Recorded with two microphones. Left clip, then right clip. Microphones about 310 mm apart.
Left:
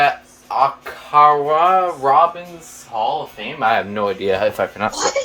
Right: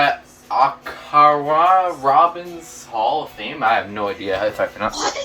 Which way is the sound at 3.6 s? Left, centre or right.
Left.